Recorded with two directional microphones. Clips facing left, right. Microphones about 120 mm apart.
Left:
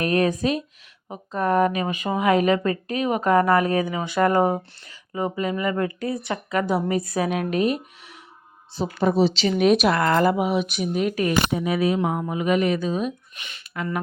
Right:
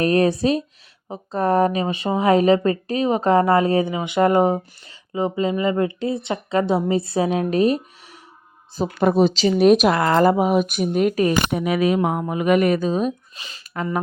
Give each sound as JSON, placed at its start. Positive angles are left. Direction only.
{"t": 0.0, "sound": "speech", "side_deg": -35}
{"t": 9.0, "sound": "a woman's voice", "side_deg": -55}
{"t": 9.3, "sound": "speech", "side_deg": -35}
{"t": 11.5, "sound": "speech", "side_deg": -85}
{"t": 11.9, "sound": "speech", "side_deg": -55}